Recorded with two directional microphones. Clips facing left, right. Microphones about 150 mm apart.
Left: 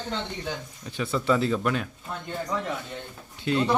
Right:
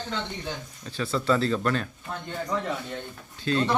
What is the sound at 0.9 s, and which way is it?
Speech, 15° left (ahead or behind).